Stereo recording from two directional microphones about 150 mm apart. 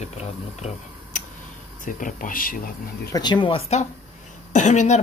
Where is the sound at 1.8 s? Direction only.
65° left (ahead or behind).